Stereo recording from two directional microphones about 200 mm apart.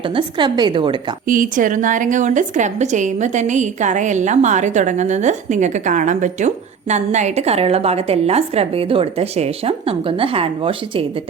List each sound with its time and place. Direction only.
0.2 s a woman's voice: 25° right (ahead or behind)
1.3 s a woman's voice: 40° right (ahead or behind)